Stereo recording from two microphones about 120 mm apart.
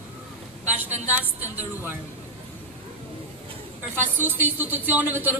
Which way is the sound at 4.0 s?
15° right (ahead or behind).